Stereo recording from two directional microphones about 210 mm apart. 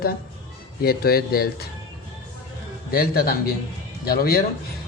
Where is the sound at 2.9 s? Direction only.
45° left (ahead or behind).